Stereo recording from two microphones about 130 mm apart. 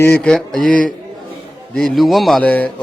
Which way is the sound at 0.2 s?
5° left (ahead or behind).